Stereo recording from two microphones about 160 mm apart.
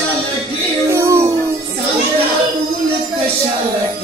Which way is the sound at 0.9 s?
20° right (ahead or behind).